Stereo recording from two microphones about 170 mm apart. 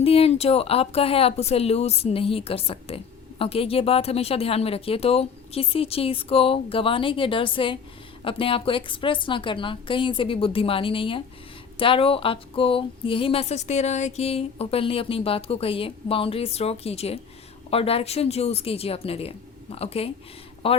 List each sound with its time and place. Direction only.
0.0 s speech: 35° left (ahead or behind)